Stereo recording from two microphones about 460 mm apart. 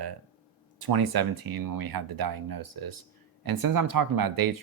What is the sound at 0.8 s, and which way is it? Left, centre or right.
Speech, right.